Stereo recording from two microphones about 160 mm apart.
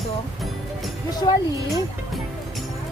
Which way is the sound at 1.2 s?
25° left (ahead or behind).